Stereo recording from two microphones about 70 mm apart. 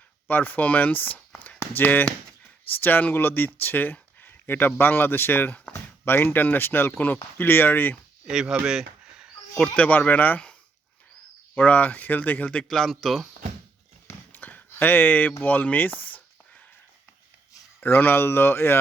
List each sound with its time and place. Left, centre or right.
0.3 s speech: left
8.3 s speech: centre
9.7 s speech: left
11.5 s speech: left; by 13.2 s centre
14.1 s a sound: left
15.4 s speech: left
16.0 s a sound: left
17.7 s speech: left